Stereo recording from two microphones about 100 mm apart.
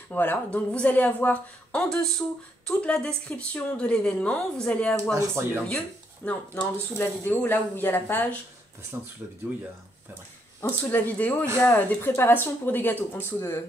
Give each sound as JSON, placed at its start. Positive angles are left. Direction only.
{"t": 0.1, "sound": "speech", "side_deg": 15}
{"t": 5.1, "sound": "speech", "side_deg": -25}
{"t": 6.2, "sound": "speech", "side_deg": 15}
{"t": 10.6, "sound": "speech", "side_deg": 20}